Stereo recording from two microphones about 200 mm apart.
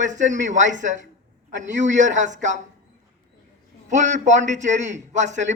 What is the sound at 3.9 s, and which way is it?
A man's voice, 35° right (ahead or behind).